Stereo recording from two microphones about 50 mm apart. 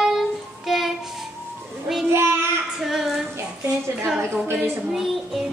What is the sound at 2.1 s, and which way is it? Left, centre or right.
Child singing, right.